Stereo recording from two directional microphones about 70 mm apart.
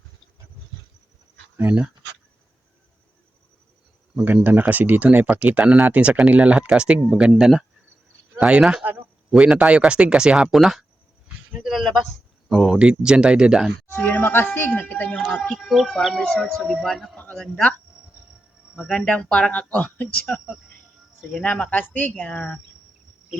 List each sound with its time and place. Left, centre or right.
1.5 s speech: right
4.4 s speech: right
13.8 s speech: left
15.4 s speech: centre
17.5 s speech: left
18.8 s speech: centre
21.4 s speech: centre